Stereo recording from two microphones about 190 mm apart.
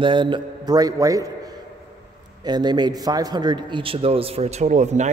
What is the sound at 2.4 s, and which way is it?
A man's voice, 20° right (ahead or behind).